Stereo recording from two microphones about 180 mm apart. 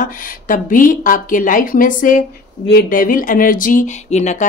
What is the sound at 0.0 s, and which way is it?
Speech, 50° left (ahead or behind).